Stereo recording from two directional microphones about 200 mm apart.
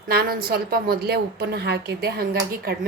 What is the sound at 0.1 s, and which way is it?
A woman's voice, 50° right (ahead or behind).